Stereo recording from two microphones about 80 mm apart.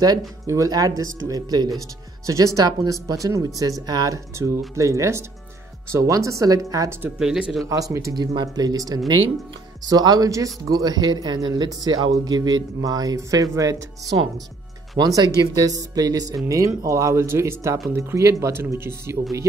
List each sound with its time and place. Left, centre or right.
0.7 s speech: right
3.8 s speech: right
4.7 s speech: right
7.2 s speech: centre
7.6 s speech: right
8.1 s speech: right